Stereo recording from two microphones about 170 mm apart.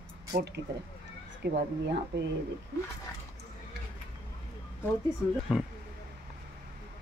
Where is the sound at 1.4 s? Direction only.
85° right.